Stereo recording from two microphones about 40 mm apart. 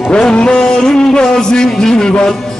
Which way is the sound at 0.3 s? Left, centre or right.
Left.